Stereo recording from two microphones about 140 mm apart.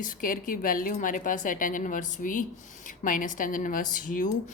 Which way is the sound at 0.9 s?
70° left (ahead or behind).